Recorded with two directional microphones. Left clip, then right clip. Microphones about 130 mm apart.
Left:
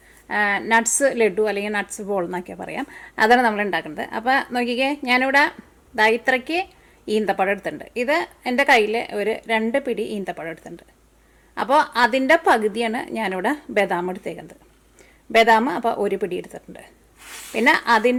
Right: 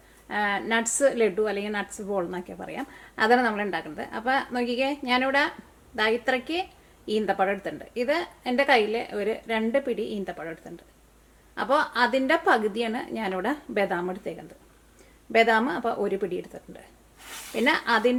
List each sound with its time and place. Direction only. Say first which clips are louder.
0.3 s a woman's voice: left 6 dB; 35° left (ahead or behind)